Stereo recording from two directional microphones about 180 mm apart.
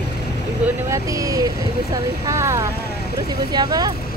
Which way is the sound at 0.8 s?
20° right (ahead or behind).